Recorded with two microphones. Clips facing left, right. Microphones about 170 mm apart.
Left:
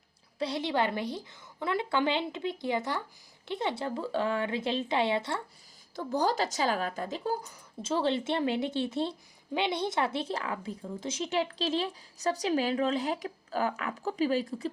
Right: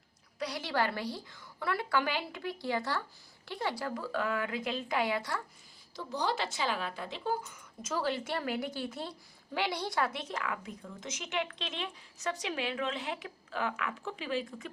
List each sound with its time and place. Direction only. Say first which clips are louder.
0.3 s a woman's voice: left 4 dB; 25° left (ahead or behind)
6.0 s a woman's voice: left 5 dB; 45° left (ahead or behind)